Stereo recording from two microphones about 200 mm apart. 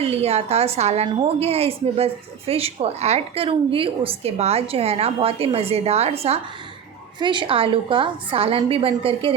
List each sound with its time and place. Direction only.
0.0 s a woman's voice: 30° right (ahead or behind)